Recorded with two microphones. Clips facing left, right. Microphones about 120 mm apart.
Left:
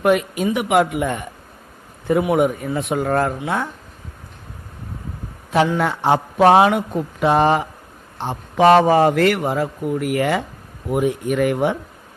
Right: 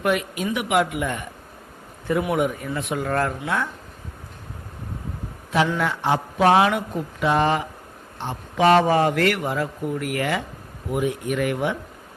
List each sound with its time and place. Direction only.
0.0 s a man's voice: 30° left (ahead or behind)
2.3 s a man's voice: 35° left (ahead or behind)
5.5 s a man's voice: 40° left (ahead or behind); by 7.0 s 20° left (ahead or behind)
7.2 s a man's voice: 35° left (ahead or behind)
8.6 s speech: 25° left (ahead or behind)
10.9 s a man's voice: 40° left (ahead or behind)